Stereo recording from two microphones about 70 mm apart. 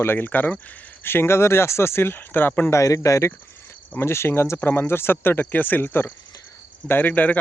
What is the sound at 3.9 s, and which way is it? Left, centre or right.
Speech, left.